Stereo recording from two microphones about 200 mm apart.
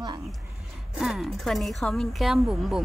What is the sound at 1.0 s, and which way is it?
Speech, centre (ahead or behind).